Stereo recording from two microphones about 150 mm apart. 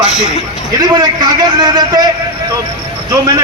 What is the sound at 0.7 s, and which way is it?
A man's voice, 30° right (ahead or behind).